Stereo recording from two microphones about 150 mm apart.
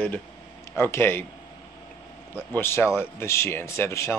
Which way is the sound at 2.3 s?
15° left (ahead or behind).